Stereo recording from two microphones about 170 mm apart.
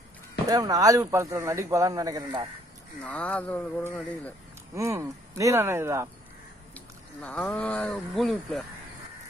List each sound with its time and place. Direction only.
0.5 s speech: 20° right (ahead or behind)
3.0 s speech: 5° left (ahead or behind)
4.7 s speech: 20° right (ahead or behind)
6.7 s speech: 10° left (ahead or behind)